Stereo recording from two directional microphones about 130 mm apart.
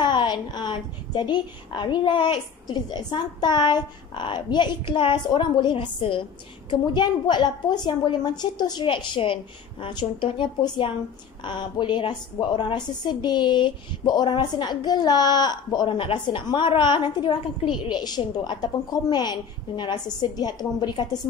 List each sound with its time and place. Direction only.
0.0 s a woman's voice: 35° left (ahead or behind)